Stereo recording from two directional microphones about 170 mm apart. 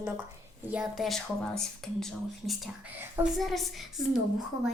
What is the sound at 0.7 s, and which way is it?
Speech, 5° right (ahead or behind).